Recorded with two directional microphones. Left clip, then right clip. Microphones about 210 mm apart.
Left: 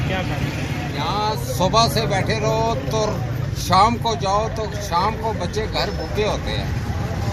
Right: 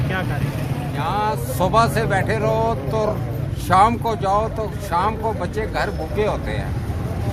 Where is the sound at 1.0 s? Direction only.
Centre (ahead or behind).